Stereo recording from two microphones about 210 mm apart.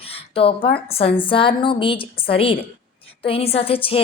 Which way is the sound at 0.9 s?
30° left (ahead or behind).